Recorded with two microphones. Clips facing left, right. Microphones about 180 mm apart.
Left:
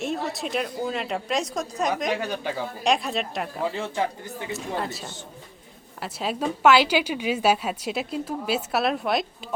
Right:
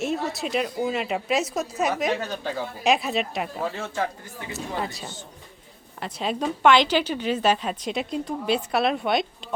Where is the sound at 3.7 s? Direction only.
15° left (ahead or behind).